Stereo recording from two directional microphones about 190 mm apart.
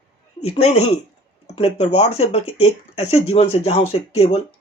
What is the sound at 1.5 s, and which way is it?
Speech, 30° left (ahead or behind).